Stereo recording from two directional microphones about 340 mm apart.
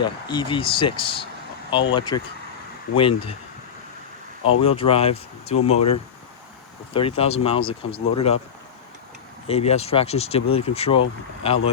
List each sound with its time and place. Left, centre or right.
0.0 s speech: centre
4.6 s speech: centre
9.5 s speech: centre